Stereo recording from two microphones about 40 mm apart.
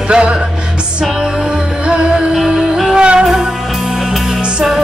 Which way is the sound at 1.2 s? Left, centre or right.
Centre.